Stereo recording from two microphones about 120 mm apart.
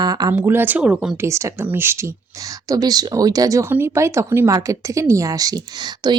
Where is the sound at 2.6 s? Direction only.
30° right (ahead or behind).